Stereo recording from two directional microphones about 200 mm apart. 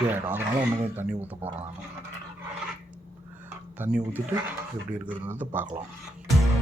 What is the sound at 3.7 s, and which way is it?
Dishes, 10° right (ahead or behind).